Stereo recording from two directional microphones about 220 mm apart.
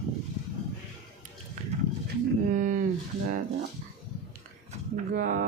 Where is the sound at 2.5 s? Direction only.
35° right (ahead or behind).